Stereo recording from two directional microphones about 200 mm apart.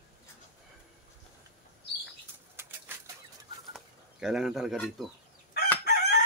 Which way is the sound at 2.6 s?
10° right (ahead or behind).